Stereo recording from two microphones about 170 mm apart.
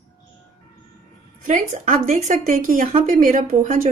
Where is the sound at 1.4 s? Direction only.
45° right (ahead or behind).